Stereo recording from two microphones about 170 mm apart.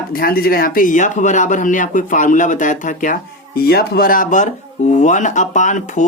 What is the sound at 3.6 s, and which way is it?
Speech, 65° left (ahead or behind).